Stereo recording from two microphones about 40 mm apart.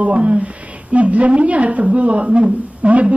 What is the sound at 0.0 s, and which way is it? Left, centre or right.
Speech, right.